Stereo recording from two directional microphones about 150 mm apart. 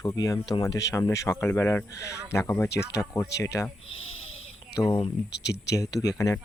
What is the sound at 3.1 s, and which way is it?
Speech, 20° left (ahead or behind).